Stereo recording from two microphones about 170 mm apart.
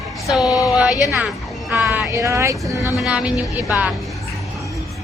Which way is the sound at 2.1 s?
20° right (ahead or behind).